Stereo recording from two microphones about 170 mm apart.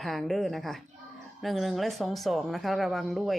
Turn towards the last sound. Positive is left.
turn(degrees=0)  # may be behind; listen again after turning